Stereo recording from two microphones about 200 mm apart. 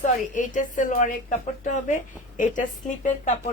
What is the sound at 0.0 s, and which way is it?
A woman's voice, 40° left (ahead or behind).